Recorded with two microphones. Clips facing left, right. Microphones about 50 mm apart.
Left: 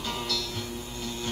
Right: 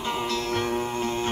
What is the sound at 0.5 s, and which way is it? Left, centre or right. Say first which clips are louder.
Music: right 11 dB; right.